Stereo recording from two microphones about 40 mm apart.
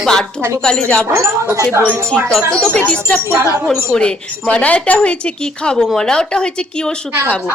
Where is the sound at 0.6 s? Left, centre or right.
Left.